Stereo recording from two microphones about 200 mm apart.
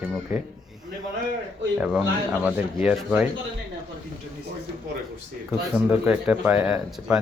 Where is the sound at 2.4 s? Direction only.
5° right (ahead or behind).